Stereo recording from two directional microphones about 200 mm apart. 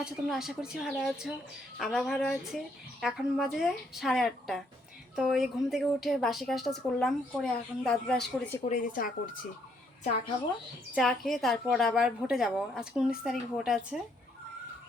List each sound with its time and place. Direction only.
0.0 s a woman's voice: centre (ahead or behind)
8.7 s speech: 45° left (ahead or behind)
10.9 s a woman's voice: centre (ahead or behind)